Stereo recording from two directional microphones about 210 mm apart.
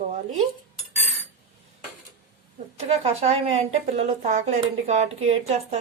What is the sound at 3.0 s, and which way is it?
A woman's voice, 30° right (ahead or behind).